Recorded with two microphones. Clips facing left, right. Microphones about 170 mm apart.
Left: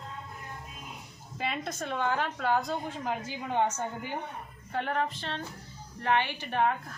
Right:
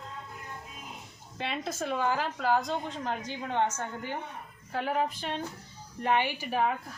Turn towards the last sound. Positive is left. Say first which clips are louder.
# even
turn(degrees=-5)  # may be behind; listen again after turning